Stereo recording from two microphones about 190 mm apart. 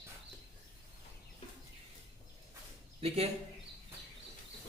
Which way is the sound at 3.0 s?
30° right (ahead or behind).